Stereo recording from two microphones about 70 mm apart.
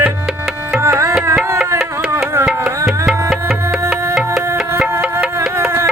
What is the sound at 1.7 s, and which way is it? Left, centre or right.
Music, right.